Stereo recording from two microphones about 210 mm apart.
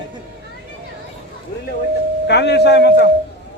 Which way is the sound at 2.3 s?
55° left (ahead or behind).